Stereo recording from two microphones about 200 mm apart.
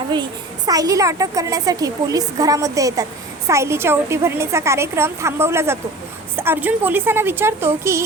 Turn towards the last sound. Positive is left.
turn(degrees=-10)  # may be behind; listen again after turning